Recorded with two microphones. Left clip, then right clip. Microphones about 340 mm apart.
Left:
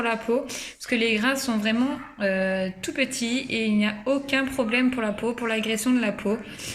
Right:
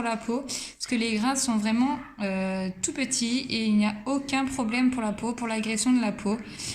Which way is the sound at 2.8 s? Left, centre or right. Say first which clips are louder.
Left 3 dB; centre.